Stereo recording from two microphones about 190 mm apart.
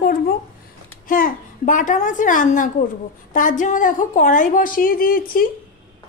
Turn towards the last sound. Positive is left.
turn(degrees=50)  # may be behind; listen again after turning